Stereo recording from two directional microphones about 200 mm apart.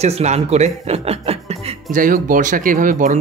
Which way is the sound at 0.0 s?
35° right (ahead or behind).